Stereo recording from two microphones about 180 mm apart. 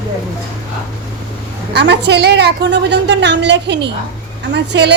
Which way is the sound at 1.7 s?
70° right (ahead or behind).